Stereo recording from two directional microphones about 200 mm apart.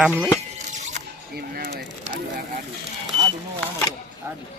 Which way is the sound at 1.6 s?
50° right (ahead or behind).